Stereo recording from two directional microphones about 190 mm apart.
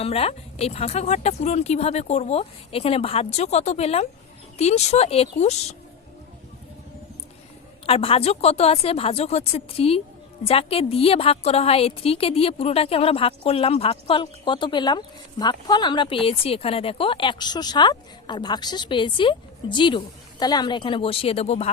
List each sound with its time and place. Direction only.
0.0 s speech: 30° left (ahead or behind)
7.9 s a woman's voice: 30° left (ahead or behind)